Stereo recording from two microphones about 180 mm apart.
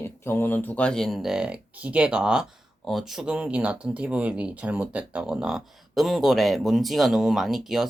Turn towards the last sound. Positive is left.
turn(degrees=0)  # may be behind; listen again after turning